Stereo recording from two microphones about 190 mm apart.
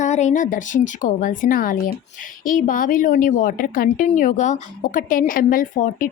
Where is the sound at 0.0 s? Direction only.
40° left (ahead or behind).